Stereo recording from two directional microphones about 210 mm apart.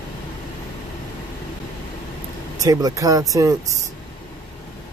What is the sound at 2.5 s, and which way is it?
Speech, 15° right (ahead or behind).